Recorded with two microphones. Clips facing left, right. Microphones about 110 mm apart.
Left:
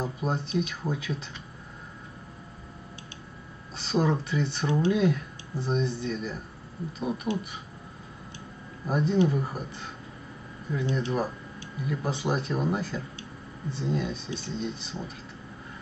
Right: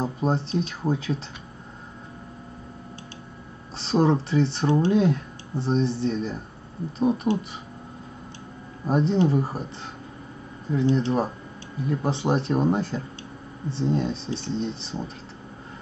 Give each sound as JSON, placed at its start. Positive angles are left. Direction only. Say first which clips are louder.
{"t": 0.0, "sound": "speech", "louder": "right 5 dB", "side_deg": -30}
{"t": 3.7, "sound": "speech", "louder": "right 5 dB", "side_deg": -30}
{"t": 8.8, "sound": "speech", "louder": "right 3 dB", "side_deg": -30}